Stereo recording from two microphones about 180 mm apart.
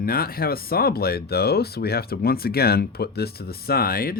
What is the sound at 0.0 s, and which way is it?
Speech, 55° left (ahead or behind).